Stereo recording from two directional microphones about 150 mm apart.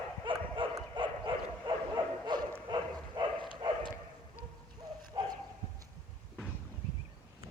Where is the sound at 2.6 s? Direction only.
30° right (ahead or behind).